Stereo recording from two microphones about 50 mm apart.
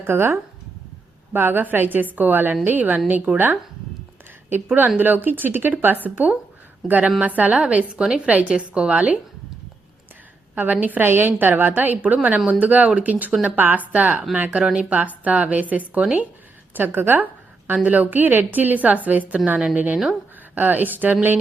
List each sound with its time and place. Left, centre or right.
0.0 s a woman's voice: right
10.5 s a woman's voice: right
14.6 s a woman's voice: right
16.7 s a woman's voice: right
17.8 s a woman's voice: right